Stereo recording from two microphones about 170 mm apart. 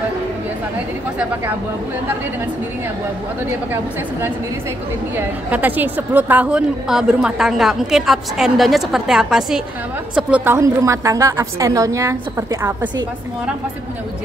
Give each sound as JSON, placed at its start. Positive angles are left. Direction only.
{"t": 5.1, "sound": "a woman's voice", "side_deg": -10}